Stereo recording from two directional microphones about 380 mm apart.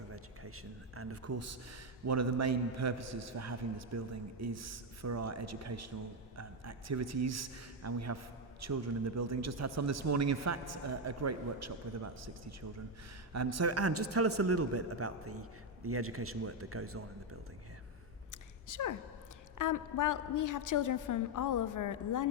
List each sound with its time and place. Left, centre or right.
0.9 s a man's voice: right
13.3 s a man's voice: right
18.3 s a sound: left
19.5 s a woman's voice: left